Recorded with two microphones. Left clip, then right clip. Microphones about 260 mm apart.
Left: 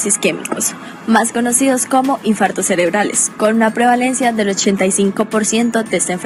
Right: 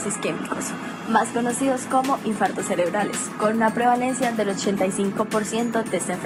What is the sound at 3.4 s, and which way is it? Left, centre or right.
Speech, left.